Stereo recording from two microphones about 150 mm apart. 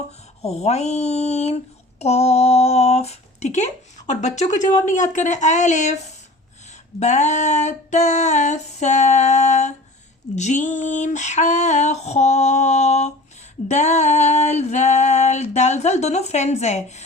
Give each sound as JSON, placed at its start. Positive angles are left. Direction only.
{"t": 0.4, "sound": "female singing", "side_deg": 45}
{"t": 2.0, "sound": "speech", "side_deg": 45}
{"t": 4.9, "sound": "female singing", "side_deg": 55}